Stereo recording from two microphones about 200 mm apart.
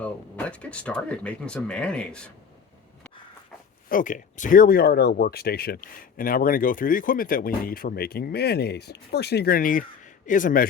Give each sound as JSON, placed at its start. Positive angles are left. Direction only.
{"t": 0.0, "sound": "speech", "side_deg": 5}
{"t": 3.8, "sound": "speech", "side_deg": 40}